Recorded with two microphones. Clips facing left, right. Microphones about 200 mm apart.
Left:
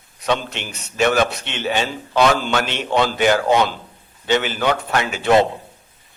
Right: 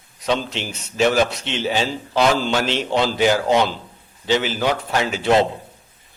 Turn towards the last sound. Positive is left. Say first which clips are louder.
# even
turn(degrees=60)  # may be behind; listen again after turning